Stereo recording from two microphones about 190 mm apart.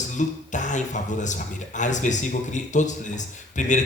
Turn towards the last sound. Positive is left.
turn(degrees=40)  # may be behind; listen again after turning